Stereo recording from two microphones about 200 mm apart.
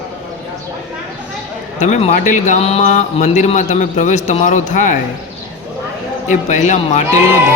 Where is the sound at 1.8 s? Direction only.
35° left (ahead or behind).